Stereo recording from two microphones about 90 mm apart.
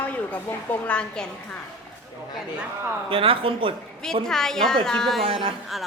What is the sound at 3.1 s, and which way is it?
Speech, 90° right.